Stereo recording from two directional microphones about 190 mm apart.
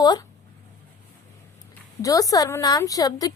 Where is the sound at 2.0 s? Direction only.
20° left (ahead or behind).